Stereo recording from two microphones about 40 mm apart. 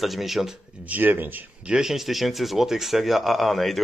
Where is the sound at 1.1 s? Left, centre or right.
Right.